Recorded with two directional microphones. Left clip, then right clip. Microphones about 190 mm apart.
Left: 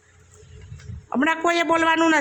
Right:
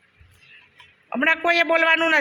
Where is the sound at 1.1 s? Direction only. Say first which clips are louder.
Right 1 dB; 20° left (ahead or behind).